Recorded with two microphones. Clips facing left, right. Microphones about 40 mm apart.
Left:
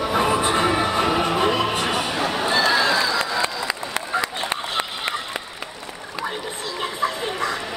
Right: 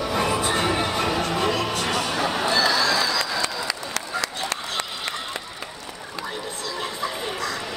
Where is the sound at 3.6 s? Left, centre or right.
Left.